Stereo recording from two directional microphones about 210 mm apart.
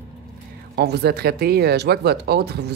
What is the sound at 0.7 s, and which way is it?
Speech, 50° right (ahead or behind).